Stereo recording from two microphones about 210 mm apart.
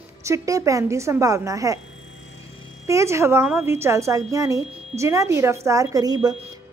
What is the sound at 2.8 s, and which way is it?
A woman's voice, 15° right (ahead or behind).